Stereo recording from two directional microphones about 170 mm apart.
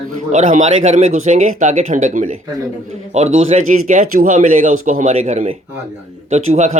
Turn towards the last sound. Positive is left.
turn(degrees=-45)  # may be behind; listen again after turning